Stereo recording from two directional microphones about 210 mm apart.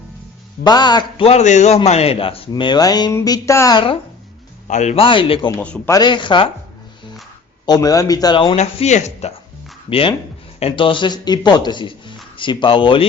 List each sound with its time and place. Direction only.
0.6 s a man's voice: 20° left (ahead or behind)
4.7 s a man's voice: 35° left (ahead or behind)
5.5 s a man's voice: 5° left (ahead or behind)
6.0 s a man's voice: 20° left (ahead or behind)
7.6 s a man's voice: 20° left (ahead or behind)